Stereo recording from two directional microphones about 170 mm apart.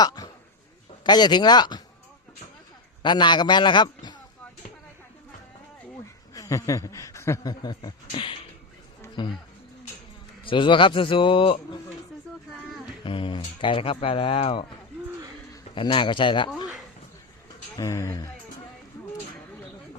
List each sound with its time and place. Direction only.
0.0 s a man's voice: 20° left (ahead or behind)
3.0 s a man's voice: 25° left (ahead or behind)
6.3 s a man's voice: 20° left (ahead or behind)
10.4 s a man's voice: 30° left (ahead or behind)
13.1 s a man's voice: 30° left (ahead or behind)
15.7 s a man's voice: 30° left (ahead or behind)
17.7 s speech: 15° left (ahead or behind)